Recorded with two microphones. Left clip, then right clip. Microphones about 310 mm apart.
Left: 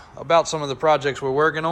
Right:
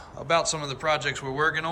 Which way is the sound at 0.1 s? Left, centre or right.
Centre.